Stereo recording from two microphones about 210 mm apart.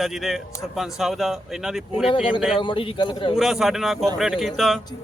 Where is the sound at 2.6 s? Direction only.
25° left (ahead or behind).